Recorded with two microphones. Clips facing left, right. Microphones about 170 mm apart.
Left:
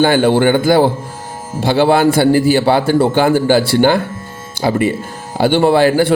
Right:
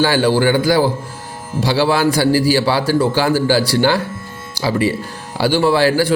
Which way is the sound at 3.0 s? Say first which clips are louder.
Left 3 dB; 55° left (ahead or behind).